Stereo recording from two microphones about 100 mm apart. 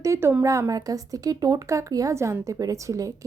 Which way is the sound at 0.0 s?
25° right (ahead or behind).